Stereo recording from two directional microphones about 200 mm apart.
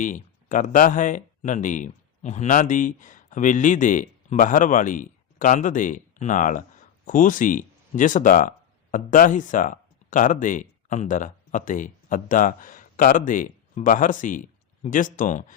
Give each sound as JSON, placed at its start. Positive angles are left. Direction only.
{"t": 0.0, "sound": "speech", "side_deg": 40}